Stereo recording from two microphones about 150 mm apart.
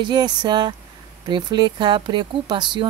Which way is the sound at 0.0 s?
30° right (ahead or behind).